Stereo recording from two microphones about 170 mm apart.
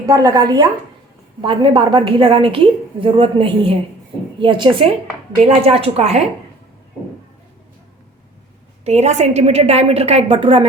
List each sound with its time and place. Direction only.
0.0 s a woman's voice: 20° right (ahead or behind); by 6.2 s 40° right (ahead or behind)
8.8 s a woman's voice: 40° right (ahead or behind)